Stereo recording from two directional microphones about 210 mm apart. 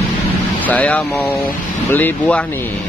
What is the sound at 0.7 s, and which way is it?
A man's voice, 5° left (ahead or behind).